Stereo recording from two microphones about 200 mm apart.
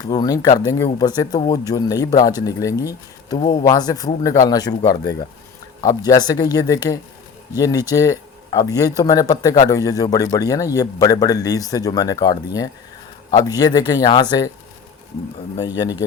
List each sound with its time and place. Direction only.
0.0 s speech: 20° left (ahead or behind)
15.8 s speech: 20° left (ahead or behind)